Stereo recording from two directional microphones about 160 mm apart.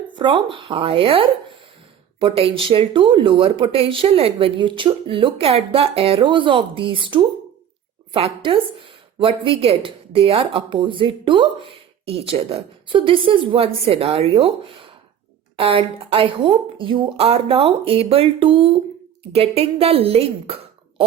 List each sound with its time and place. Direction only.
0.2 s speech: 30° right (ahead or behind)